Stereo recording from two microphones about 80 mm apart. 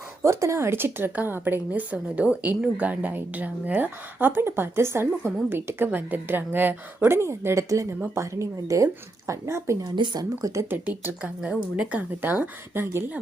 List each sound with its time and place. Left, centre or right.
0.2 s a woman's voice: right
9.8 s speech: right
10.4 s speech: right
10.7 s a woman's voice: right